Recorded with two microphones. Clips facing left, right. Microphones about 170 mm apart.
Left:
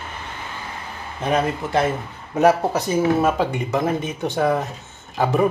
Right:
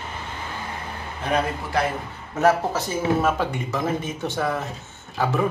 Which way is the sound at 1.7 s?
25° left (ahead or behind).